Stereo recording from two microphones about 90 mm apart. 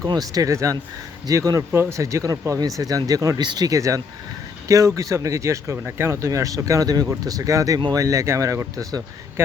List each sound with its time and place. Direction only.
0.0 s speech: 45° right (ahead or behind)